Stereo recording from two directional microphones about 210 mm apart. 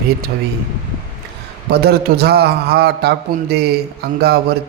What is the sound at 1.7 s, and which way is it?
A man's voice, 50° right (ahead or behind).